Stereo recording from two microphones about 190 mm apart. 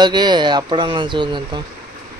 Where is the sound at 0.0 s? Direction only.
25° right (ahead or behind).